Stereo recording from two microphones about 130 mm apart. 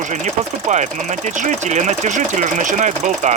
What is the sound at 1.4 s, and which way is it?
Speech, 70° right (ahead or behind).